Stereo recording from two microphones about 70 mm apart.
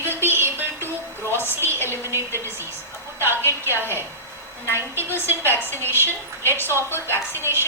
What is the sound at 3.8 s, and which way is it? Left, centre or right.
Speech, right.